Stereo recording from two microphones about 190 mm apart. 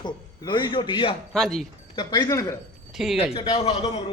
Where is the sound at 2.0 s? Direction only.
25° left (ahead or behind).